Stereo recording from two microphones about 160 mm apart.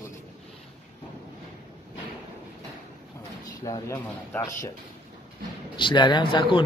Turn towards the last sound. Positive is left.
turn(degrees=30)  # may be behind; listen again after turning